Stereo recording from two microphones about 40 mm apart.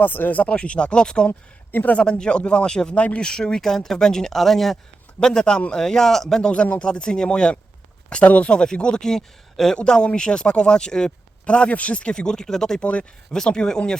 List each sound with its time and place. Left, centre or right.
0.0 s speech: left
0.5 s speech: left
1.3 s speech: left
2.0 s speech: left
2.9 s speech: left
3.2 s speech: centre
5.2 s speech: centre
6.4 s speech: left
8.1 s speech: left; by 9.7 s centre
9.7 s speech: left
11.4 s speech: left; by 12.8 s centre
12.8 s speech: left
13.3 s speech: centre